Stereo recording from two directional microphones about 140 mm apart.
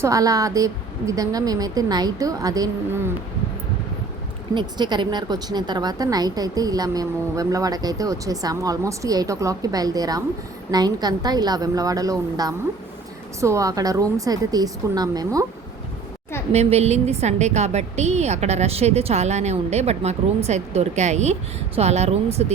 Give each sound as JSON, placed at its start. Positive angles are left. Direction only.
{"t": 0.0, "sound": "a woman's voice", "side_deg": -25}
{"t": 4.5, "sound": "a woman's voice", "side_deg": -30}
{"t": 16.5, "sound": "a woman's voice", "side_deg": -50}